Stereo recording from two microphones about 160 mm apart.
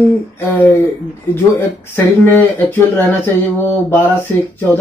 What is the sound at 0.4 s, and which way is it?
Speech, 10° left (ahead or behind).